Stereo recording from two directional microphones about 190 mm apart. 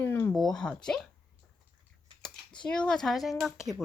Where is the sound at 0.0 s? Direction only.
10° left (ahead or behind).